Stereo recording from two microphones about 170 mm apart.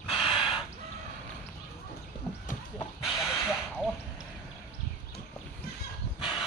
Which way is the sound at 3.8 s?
Centre (ahead or behind).